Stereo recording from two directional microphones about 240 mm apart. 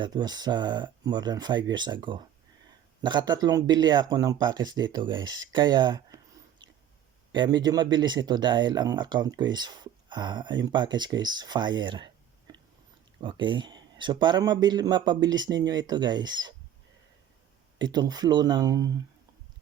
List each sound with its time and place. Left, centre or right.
0.0 s speech: centre
7.3 s speech: centre
17.7 s speech: centre